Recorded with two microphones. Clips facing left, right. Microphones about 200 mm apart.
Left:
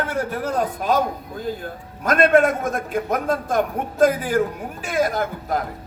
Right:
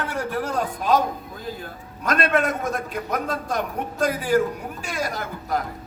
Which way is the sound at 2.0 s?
50° left (ahead or behind).